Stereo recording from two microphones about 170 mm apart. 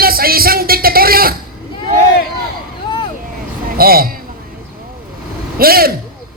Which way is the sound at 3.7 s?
60° right (ahead or behind).